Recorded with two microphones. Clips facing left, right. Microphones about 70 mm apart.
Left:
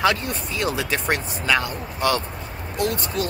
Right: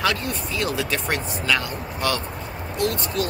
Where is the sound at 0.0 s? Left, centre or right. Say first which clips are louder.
Left 3 dB; centre.